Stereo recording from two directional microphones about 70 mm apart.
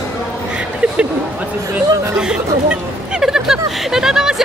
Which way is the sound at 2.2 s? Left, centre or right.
Centre.